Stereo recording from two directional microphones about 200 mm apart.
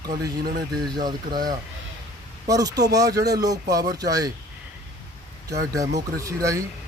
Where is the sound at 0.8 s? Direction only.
20° right (ahead or behind).